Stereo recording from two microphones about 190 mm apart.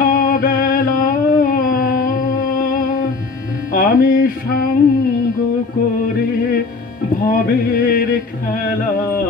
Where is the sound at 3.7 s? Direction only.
45° left (ahead or behind).